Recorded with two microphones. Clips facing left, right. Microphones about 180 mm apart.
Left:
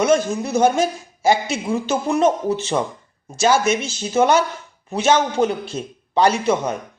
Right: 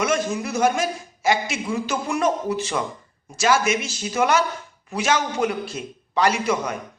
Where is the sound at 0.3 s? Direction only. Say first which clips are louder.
Left 4 dB; 25° left (ahead or behind).